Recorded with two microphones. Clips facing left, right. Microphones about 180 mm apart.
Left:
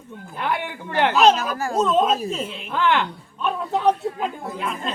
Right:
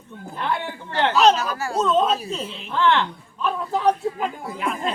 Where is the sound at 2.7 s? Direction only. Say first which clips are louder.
Right 1 dB; 15° left (ahead or behind).